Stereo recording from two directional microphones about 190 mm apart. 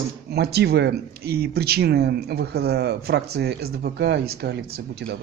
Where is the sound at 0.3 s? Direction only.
60° right (ahead or behind).